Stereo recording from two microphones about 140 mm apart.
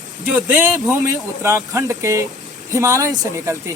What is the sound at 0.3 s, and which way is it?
Speech, 15° right (ahead or behind).